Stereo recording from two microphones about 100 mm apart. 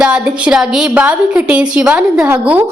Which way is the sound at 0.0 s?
10° right (ahead or behind).